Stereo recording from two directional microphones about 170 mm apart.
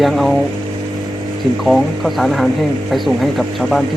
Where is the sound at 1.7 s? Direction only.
Centre (ahead or behind).